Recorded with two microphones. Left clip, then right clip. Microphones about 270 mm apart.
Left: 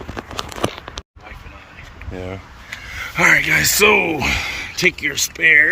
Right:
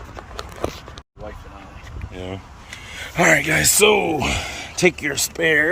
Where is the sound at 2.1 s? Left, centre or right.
Centre.